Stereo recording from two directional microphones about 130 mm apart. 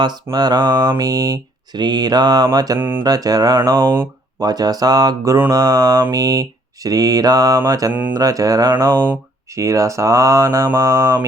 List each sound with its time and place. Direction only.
0.0 s speech: 35° right (ahead or behind)
2.7 s a sound: 15° right (ahead or behind)
3.0 s mantra: 30° right (ahead or behind)